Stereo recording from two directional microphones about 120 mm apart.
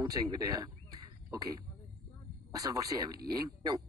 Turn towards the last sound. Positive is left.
turn(degrees=-35)  # may be behind; listen again after turning